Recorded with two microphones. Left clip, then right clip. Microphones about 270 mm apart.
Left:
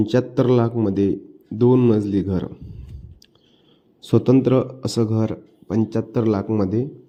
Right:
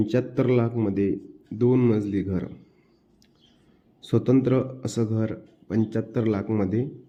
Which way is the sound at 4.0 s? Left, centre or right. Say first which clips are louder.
Left 5 dB; centre.